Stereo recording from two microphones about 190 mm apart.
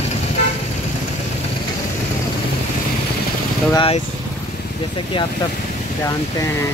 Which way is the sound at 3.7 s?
25° left (ahead or behind).